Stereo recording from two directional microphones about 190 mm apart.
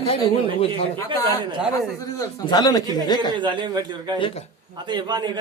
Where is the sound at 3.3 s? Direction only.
25° right (ahead or behind).